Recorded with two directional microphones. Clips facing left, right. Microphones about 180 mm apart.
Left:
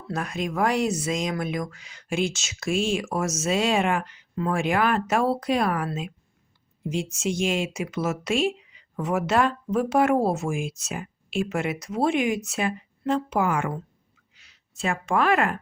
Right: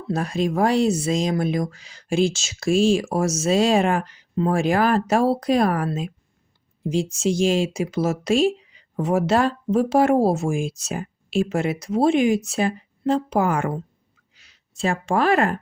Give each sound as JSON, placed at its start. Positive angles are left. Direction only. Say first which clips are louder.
{"t": 0.1, "sound": "speech", "louder": "right 6 dB", "side_deg": -30}